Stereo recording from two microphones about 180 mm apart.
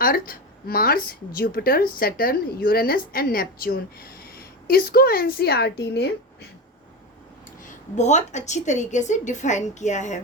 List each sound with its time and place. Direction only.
0.0 s a woman's voice: 55° left (ahead or behind)
7.6 s a woman's voice: 40° left (ahead or behind)